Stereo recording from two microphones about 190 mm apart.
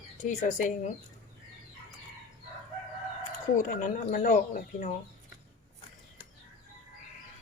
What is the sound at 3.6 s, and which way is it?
Speech, 45° left (ahead or behind).